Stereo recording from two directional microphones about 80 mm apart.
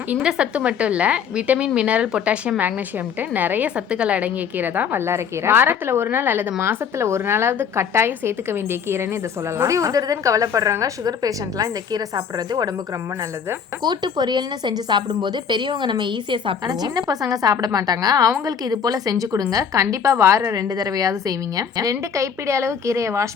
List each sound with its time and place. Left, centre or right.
0.1 s a woman's voice: centre; by 9.0 s right
9.6 s a woman's voice: right
13.8 s a woman's voice: right
16.6 s a woman's voice: right